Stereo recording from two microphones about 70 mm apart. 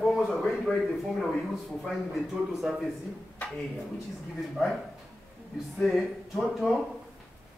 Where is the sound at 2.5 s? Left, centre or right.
Centre.